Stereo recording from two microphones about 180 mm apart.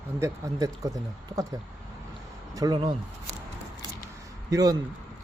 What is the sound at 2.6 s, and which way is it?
Speech, 20° right (ahead or behind).